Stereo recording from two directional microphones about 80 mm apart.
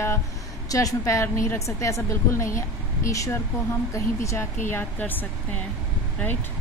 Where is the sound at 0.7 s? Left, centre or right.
Left.